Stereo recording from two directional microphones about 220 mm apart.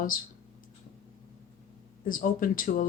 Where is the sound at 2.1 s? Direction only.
40° left (ahead or behind).